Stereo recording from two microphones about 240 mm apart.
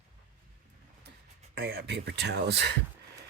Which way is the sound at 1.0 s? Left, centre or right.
Right.